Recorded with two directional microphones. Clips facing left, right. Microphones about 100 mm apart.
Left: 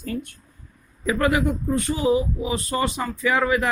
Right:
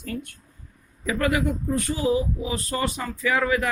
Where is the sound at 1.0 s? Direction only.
30° left (ahead or behind).